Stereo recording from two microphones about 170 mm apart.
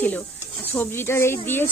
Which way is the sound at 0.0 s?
10° left (ahead or behind).